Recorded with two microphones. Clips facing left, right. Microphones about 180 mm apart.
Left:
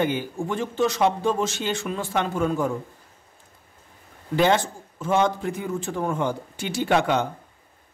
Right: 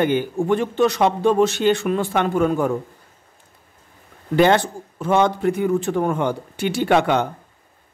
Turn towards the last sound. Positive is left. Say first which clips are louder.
# right 4 dB
turn(degrees=-60)  # may be behind; listen again after turning